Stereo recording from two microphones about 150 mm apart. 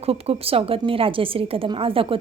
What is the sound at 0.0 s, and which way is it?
A woman's voice, 40° right (ahead or behind).